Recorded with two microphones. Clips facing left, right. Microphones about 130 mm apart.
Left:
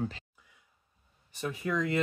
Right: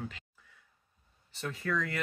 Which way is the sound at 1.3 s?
15° left (ahead or behind).